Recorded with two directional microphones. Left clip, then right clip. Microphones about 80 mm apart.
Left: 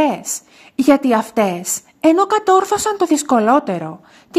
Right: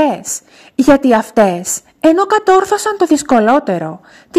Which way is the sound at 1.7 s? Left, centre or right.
Right.